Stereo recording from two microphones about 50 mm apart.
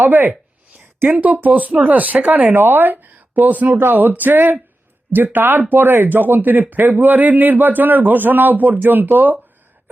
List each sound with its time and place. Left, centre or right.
0.0 s speech: right